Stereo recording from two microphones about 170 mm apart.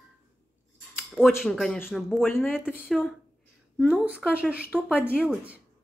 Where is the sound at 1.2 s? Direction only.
Centre (ahead or behind).